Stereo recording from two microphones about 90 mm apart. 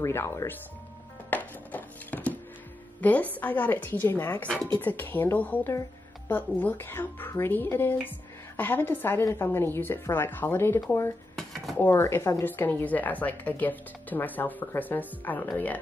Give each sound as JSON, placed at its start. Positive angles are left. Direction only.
{"t": 0.0, "sound": "speech", "side_deg": 30}
{"t": 1.3, "sound": "music", "side_deg": 20}
{"t": 3.0, "sound": "speech", "side_deg": 15}